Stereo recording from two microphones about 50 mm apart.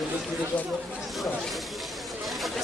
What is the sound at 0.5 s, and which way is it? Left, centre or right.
Speech, left.